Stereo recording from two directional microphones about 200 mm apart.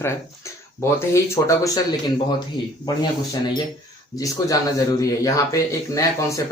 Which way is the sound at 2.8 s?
20° left (ahead or behind).